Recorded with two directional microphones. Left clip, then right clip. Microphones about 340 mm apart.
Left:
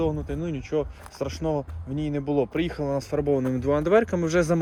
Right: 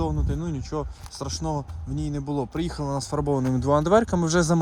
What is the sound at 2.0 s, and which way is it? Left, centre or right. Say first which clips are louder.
Speech: left 3 dB; right.